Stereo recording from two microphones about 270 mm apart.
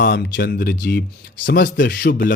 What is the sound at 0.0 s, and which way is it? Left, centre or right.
Speech, left.